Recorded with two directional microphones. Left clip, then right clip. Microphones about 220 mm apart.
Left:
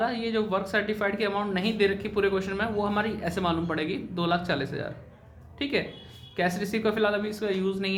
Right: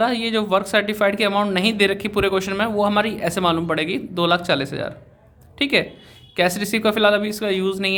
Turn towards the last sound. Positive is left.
turn(degrees=-40)  # may be behind; listen again after turning